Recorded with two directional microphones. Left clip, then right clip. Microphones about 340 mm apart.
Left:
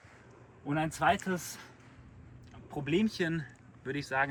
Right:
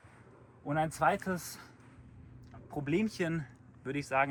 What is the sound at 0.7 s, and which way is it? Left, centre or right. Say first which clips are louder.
Speech: left 1 dB; centre.